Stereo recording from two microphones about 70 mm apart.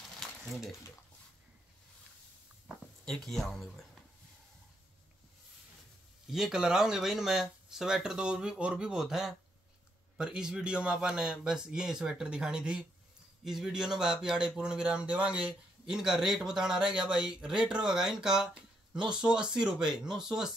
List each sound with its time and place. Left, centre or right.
0.2 s a sound: centre
3.1 s speech: centre
6.3 s speech: centre
15.8 s speech: centre